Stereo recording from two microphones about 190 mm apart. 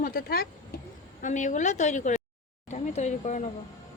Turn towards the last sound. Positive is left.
turn(degrees=35)  # may be behind; listen again after turning